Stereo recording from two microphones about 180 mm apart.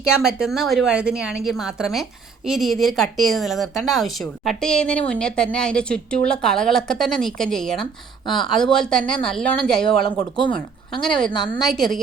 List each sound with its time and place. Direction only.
0.3 s a woman's voice: centre (ahead or behind)
11.3 s a woman's voice: 25° left (ahead or behind)
11.6 s a woman's voice: centre (ahead or behind)